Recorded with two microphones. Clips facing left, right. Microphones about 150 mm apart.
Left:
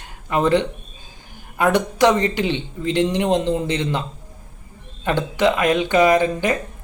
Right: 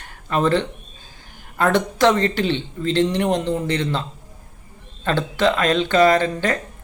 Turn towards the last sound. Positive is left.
turn(degrees=15)  # may be behind; listen again after turning